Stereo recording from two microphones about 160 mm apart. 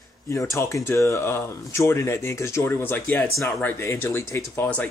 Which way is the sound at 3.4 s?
15° left (ahead or behind).